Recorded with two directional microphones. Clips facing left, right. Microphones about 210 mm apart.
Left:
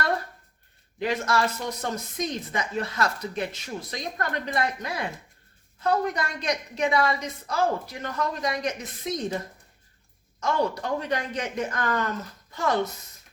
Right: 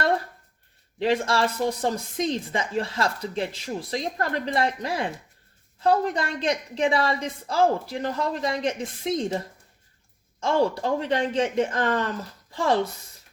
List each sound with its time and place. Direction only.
0.9 s speech: 30° right (ahead or behind)
10.4 s speech: 30° right (ahead or behind)